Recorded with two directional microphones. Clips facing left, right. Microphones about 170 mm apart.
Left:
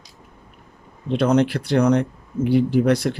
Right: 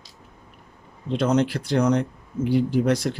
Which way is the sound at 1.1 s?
60° left (ahead or behind).